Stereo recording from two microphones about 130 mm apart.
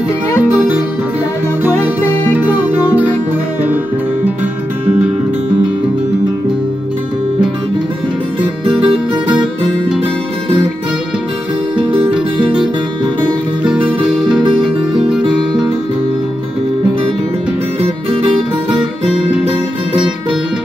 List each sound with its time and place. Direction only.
8.4 s music: 45° right (ahead or behind)
11.7 s music: 10° right (ahead or behind)
13.7 s music: 5° right (ahead or behind)